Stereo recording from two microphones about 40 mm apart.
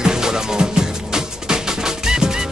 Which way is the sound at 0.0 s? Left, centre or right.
Centre.